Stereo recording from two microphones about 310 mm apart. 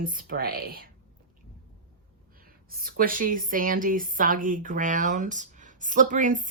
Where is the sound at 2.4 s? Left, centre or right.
Right.